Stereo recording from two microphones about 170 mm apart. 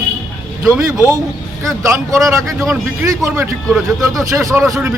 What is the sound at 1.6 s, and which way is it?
Speech, 15° right (ahead or behind).